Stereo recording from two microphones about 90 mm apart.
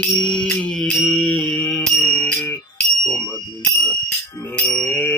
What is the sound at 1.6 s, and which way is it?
Music, 15° left (ahead or behind).